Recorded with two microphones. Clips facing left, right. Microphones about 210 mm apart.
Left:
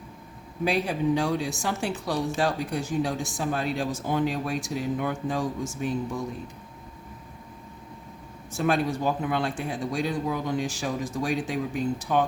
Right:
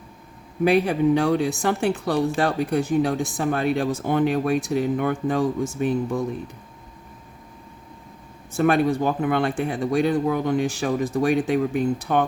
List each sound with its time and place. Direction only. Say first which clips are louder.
0.6 s speech: right 7 dB; 60° right (ahead or behind)
8.5 s speech: right 6 dB; 60° right (ahead or behind)